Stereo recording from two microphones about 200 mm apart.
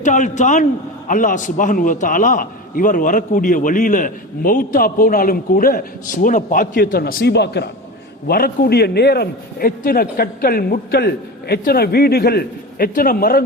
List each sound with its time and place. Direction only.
0.0 s a man's voice: 40° left (ahead or behind)